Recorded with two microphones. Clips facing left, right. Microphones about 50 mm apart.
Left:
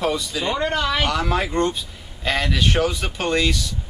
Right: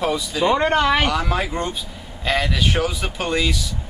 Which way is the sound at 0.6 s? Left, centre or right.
Right.